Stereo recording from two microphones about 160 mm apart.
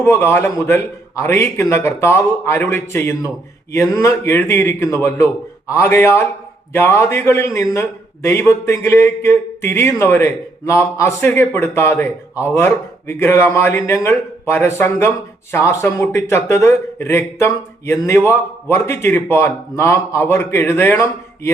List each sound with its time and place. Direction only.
0.0 s a man's voice: 15° left (ahead or behind)